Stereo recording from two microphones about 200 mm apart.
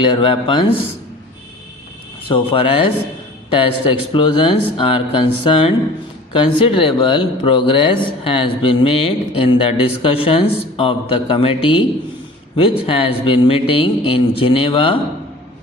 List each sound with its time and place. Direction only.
0.0 s speech: 25° left (ahead or behind)
2.3 s speech: 25° left (ahead or behind)
12.8 s speech: 30° left (ahead or behind)